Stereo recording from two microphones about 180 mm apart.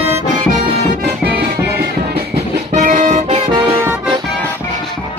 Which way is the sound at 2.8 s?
45° right (ahead or behind).